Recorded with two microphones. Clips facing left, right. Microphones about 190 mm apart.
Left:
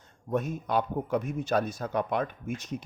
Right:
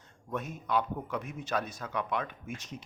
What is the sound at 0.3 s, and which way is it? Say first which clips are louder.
A man's voice: left 5 dB; 40° left (ahead or behind).